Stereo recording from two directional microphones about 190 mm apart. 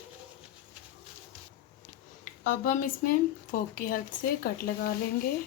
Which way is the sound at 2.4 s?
45° left (ahead or behind).